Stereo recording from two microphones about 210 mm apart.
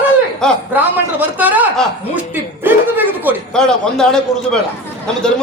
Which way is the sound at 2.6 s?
10° right (ahead or behind).